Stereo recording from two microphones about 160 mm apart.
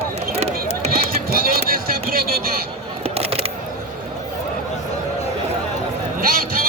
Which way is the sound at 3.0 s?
40° right (ahead or behind).